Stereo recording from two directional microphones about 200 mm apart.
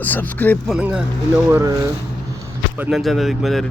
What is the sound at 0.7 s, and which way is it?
Speech, 5° right (ahead or behind).